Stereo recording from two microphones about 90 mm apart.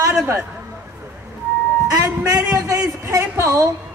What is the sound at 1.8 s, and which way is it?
A man's voice, 40° right (ahead or behind).